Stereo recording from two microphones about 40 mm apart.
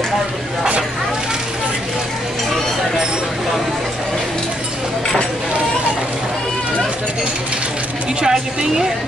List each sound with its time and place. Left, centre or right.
8.2 s a woman's voice: centre